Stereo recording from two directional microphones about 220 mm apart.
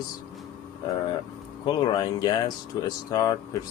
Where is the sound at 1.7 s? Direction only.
20° left (ahead or behind).